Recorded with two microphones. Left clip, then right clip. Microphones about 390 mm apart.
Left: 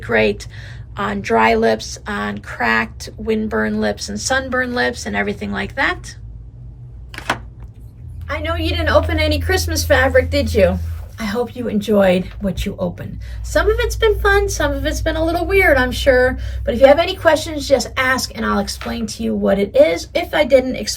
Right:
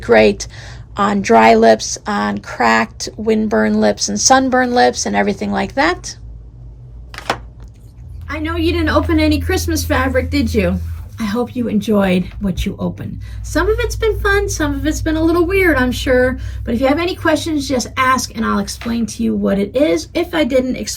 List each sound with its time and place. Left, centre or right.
0.0 s speech: centre
7.1 s a sound: centre
8.3 s a woman's voice: centre
11.8 s a woman's voice: centre